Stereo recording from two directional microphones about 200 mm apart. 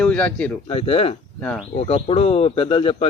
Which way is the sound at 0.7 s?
30° left (ahead or behind).